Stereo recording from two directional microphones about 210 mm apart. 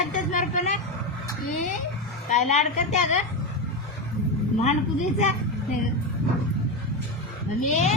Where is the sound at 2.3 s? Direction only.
35° left (ahead or behind).